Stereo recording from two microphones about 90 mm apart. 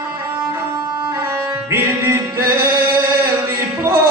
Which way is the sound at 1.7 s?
30° right (ahead or behind).